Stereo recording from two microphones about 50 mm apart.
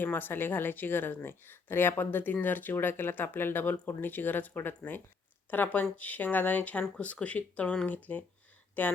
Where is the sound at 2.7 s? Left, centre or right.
Left.